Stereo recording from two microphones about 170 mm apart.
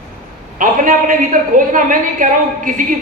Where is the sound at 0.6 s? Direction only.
50° right (ahead or behind).